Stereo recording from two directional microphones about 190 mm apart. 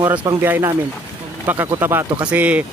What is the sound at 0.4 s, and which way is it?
Speech, 10° right (ahead or behind).